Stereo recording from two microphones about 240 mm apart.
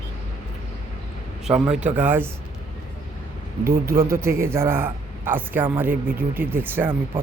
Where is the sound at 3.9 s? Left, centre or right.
Right.